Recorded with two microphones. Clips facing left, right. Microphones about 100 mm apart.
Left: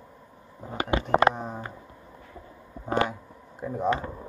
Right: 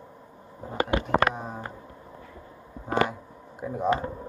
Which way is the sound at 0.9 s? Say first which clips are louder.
Left 3 dB; 25° left (ahead or behind).